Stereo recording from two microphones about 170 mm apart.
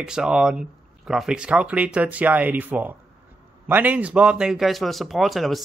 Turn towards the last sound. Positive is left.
turn(degrees=0)  # may be behind; listen again after turning